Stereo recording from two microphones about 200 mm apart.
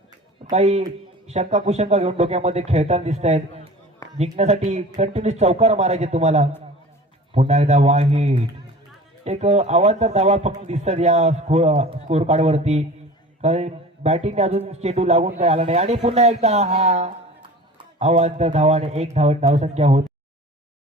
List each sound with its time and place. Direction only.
0.5 s a man's voice: 35° right (ahead or behind)